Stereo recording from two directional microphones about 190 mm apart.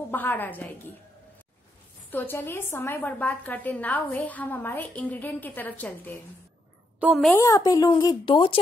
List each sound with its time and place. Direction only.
0.1 s a woman's voice: 10° left (ahead or behind)
2.0 s a woman's voice: 10° left (ahead or behind)
7.3 s speech: 20° left (ahead or behind)